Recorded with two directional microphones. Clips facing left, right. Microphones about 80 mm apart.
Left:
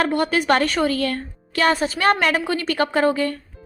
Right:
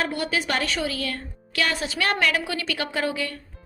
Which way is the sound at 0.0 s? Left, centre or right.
Left.